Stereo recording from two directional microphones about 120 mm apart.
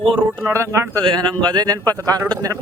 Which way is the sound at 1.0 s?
40° right (ahead or behind).